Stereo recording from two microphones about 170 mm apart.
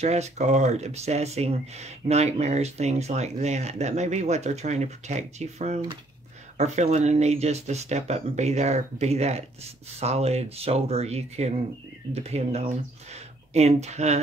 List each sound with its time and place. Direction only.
0.0 s speech: 40° right (ahead or behind)